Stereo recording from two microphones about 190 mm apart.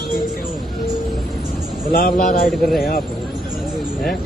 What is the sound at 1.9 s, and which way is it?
Speech, 50° left (ahead or behind).